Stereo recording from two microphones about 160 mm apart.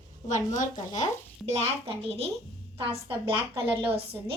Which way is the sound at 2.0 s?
40° right (ahead or behind).